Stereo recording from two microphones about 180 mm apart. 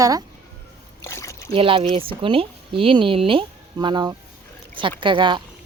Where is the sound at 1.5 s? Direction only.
30° right (ahead or behind).